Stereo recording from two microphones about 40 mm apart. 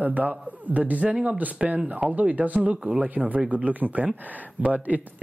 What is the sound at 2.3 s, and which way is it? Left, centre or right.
Speech, right.